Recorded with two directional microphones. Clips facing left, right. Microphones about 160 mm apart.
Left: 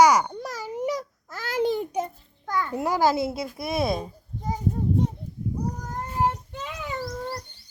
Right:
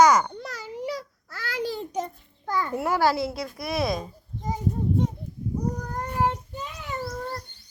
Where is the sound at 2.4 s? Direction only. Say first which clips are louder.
Even; 5° right (ahead or behind).